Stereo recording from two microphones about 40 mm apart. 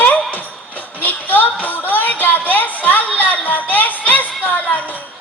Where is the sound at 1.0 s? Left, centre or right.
Left.